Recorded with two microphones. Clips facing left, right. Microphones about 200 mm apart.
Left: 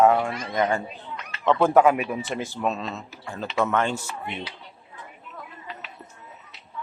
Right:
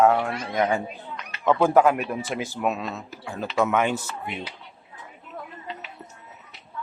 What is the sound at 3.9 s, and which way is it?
Speech, 10° left (ahead or behind).